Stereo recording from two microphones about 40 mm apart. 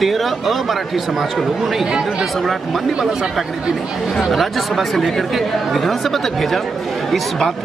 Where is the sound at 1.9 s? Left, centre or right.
Right.